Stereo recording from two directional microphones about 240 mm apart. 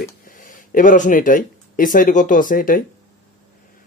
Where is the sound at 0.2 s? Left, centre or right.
Left.